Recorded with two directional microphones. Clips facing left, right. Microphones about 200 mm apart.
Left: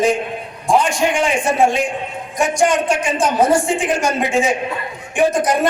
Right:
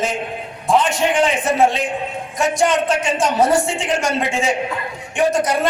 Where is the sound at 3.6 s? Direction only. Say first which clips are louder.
Left 2 dB; 15° left (ahead or behind).